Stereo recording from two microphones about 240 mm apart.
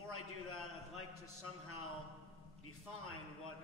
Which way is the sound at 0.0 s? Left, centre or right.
Left.